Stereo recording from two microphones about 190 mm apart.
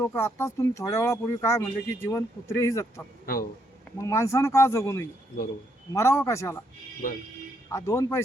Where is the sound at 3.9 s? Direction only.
15° left (ahead or behind).